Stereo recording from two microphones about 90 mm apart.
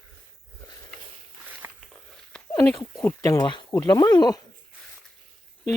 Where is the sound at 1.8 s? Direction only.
5° left (ahead or behind).